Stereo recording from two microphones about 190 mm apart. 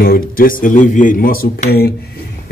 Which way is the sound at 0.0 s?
50° left (ahead or behind).